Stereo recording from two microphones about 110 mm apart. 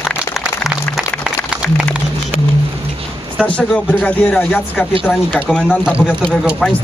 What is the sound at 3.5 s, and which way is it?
Speech, 10° left (ahead or behind).